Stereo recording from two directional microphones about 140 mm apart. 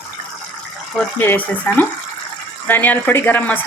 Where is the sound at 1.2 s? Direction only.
15° left (ahead or behind).